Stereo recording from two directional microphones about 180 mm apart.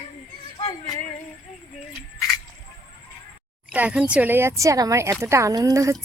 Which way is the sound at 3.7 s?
5° right (ahead or behind).